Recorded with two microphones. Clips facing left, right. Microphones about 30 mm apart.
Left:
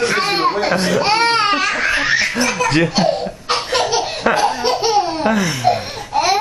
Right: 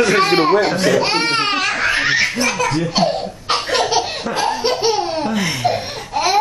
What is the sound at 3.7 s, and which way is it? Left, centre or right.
Laughter, centre.